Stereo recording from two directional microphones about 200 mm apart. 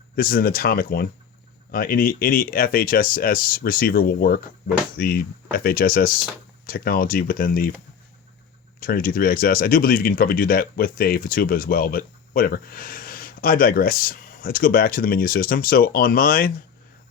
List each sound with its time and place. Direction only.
0.2 s speech: 45° left (ahead or behind)
8.8 s speech: 45° left (ahead or behind)